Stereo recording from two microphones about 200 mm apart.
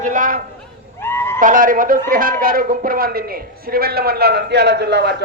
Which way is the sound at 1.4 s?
40° right (ahead or behind).